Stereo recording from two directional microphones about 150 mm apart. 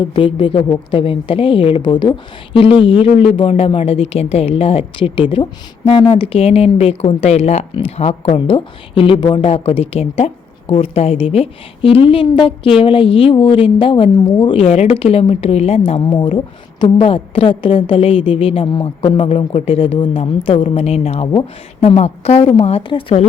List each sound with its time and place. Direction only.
0.0 s a woman's voice: 35° left (ahead or behind)